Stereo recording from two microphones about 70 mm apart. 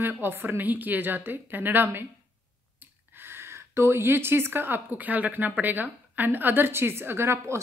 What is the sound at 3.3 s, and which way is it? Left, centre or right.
A woman's voice, right.